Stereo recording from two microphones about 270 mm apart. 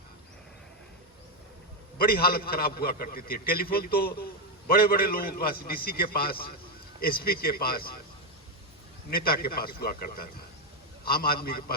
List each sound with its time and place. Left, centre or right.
2.0 s a man's voice: left
9.0 s a man's voice: left